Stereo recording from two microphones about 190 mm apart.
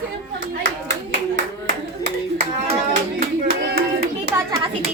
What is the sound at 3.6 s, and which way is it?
Hands, 50° right (ahead or behind).